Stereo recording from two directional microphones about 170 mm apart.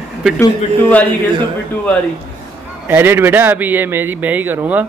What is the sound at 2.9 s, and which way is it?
A man's voice, 10° right (ahead or behind).